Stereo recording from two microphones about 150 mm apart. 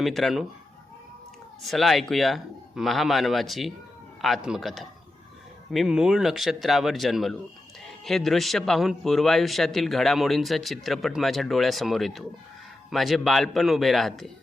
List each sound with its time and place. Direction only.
0.0 s a man's voice: centre (ahead or behind)
1.6 s a man's voice: centre (ahead or behind)